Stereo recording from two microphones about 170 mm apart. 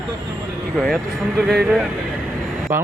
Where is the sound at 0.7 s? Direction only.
5° left (ahead or behind).